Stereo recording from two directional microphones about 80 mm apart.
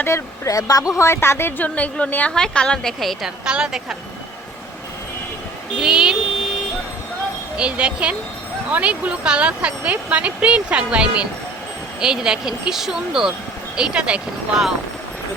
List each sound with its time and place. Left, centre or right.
0.1 s speech: left
0.4 s speech: left
0.9 s a woman's voice: left; by 3.2 s centre
3.2 s speech: centre
5.8 s speech: centre
7.5 s speech: centre